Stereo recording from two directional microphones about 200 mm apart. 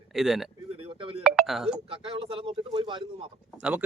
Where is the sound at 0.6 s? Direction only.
30° right (ahead or behind).